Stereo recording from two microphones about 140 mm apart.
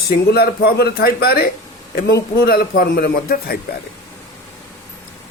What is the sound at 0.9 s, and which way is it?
Speech, 90° left.